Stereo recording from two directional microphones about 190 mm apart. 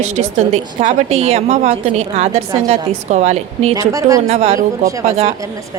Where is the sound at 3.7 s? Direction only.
20° right (ahead or behind).